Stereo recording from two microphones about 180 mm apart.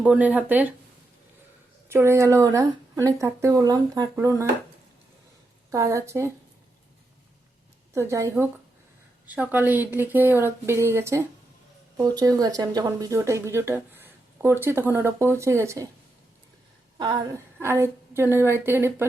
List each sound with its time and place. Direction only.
0.0 s speech: 5° right (ahead or behind)
1.9 s speech: 15° right (ahead or behind)
5.7 s speech: 15° right (ahead or behind)
7.9 s speech: 15° right (ahead or behind)
17.3 s a woman's voice: 15° right (ahead or behind)